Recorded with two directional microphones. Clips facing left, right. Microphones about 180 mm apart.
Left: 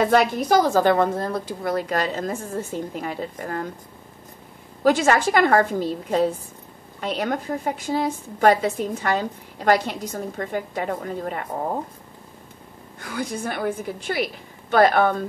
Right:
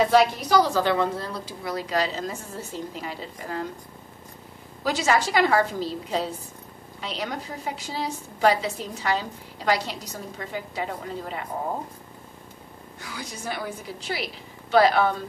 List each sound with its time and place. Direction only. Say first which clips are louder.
0.0 s a woman's voice: left 1 dB; 50° left (ahead or behind)
4.8 s a woman's voice: left 5 dB; 55° left (ahead or behind)
13.0 s a woman's voice: left 8 dB; 55° left (ahead or behind)